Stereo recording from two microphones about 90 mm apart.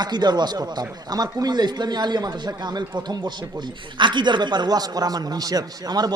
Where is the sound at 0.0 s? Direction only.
50° right (ahead or behind).